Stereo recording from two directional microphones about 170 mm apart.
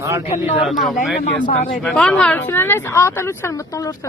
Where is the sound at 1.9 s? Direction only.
5° left (ahead or behind).